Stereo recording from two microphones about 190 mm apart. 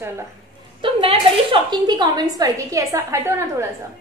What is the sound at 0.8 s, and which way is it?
A woman's voice, 30° right (ahead or behind).